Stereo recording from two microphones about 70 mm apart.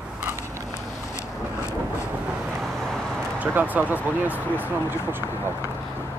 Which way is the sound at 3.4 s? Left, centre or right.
Right.